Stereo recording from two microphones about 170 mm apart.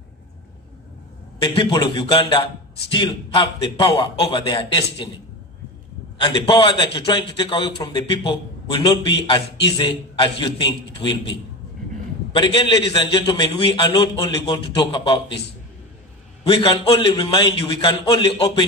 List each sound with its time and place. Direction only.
1.4 s a man's voice: 25° left (ahead or behind)
6.1 s a man's voice: 30° left (ahead or behind)
16.4 s a man's voice: 30° left (ahead or behind)